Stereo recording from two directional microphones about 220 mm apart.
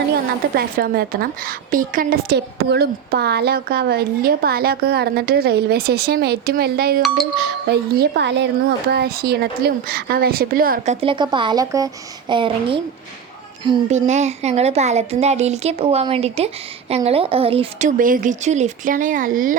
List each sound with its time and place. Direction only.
0.5 s a woman's voice: 40° right (ahead or behind)
11.0 s a woman's voice: 20° right (ahead or behind); by 19.5 s 40° right (ahead or behind)